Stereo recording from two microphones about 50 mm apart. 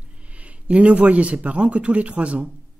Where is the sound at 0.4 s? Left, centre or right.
Right.